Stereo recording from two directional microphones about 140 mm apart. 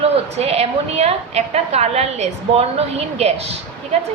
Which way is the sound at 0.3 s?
45° right (ahead or behind).